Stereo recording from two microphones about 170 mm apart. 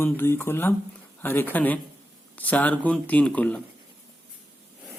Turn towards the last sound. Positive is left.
turn(degrees=10)  # may be behind; listen again after turning